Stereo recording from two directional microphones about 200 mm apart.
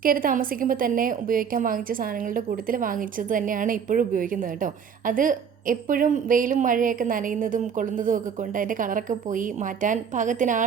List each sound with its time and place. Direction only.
0.0 s a woman's voice: 45° right (ahead or behind)